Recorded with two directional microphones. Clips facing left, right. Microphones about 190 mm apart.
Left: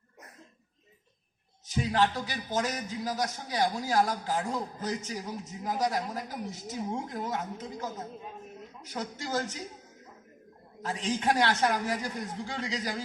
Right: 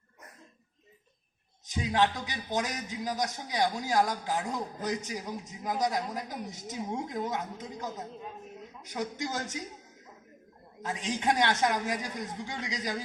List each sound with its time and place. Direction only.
1.6 s a man's voice: 15° right (ahead or behind)
10.8 s a man's voice: 15° right (ahead or behind)